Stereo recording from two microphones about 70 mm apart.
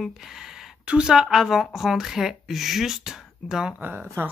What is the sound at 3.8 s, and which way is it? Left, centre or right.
Speech, right.